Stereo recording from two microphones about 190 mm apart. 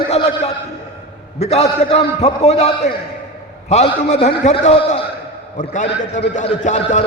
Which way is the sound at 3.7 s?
35° left (ahead or behind).